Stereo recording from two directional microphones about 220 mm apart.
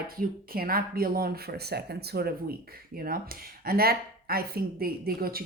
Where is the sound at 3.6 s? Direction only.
45° right (ahead or behind).